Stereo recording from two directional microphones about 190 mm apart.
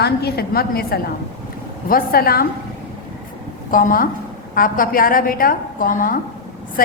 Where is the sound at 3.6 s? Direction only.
45° left (ahead or behind).